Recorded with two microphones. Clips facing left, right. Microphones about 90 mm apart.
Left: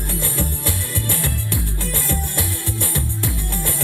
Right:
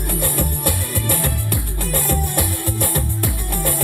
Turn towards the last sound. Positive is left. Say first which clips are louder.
# right 3 dB
turn(degrees=-50)  # may be behind; listen again after turning